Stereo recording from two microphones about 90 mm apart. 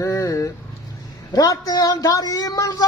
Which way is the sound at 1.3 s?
45° left (ahead or behind).